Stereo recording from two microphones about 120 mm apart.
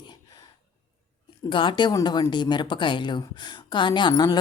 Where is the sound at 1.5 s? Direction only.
45° left (ahead or behind).